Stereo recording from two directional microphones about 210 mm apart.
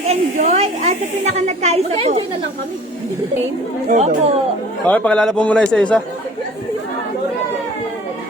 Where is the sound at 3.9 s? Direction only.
35° right (ahead or behind).